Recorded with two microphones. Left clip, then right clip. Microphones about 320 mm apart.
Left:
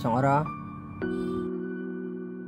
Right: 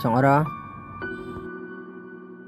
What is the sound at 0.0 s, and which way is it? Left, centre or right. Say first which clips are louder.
Speech: right 5 dB; centre.